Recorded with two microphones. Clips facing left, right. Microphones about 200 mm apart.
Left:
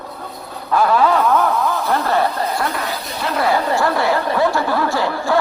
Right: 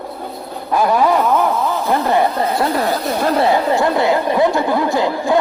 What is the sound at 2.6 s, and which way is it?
Speech, 35° right (ahead or behind).